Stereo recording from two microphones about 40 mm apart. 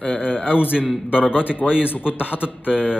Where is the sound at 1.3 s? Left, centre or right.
Left.